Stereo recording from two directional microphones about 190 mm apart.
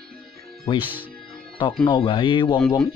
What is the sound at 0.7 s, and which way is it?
Speech, 25° left (ahead or behind).